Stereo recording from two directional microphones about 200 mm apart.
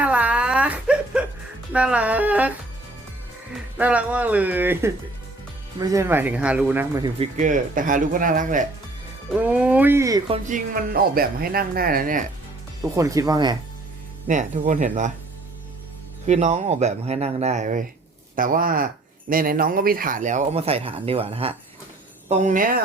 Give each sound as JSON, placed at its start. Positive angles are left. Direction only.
{"t": 0.0, "sound": "whimper", "side_deg": -5}
{"t": 1.7, "sound": "speech", "side_deg": -5}
{"t": 3.8, "sound": "speech", "side_deg": -5}
{"t": 7.3, "sound": "speech", "side_deg": -40}
{"t": 9.3, "sound": "speech", "side_deg": -5}
{"t": 12.8, "sound": "speech", "side_deg": -15}
{"t": 14.3, "sound": "speech", "side_deg": -40}
{"t": 16.2, "sound": "speech", "side_deg": -35}
{"t": 22.3, "sound": "speech", "side_deg": -40}